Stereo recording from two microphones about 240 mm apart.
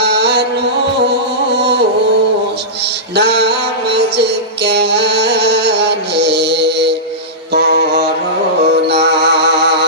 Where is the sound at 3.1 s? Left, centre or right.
Right.